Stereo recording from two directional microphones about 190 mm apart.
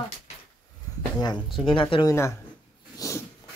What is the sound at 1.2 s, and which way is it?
Speech, 25° left (ahead or behind).